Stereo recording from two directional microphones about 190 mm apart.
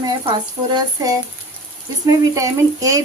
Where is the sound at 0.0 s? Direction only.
20° right (ahead or behind).